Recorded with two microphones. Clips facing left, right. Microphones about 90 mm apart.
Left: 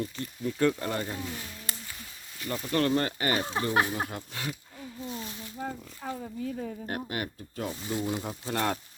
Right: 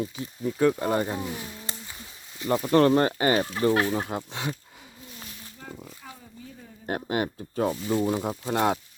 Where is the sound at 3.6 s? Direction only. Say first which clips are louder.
Right 7 dB; 30° left (ahead or behind).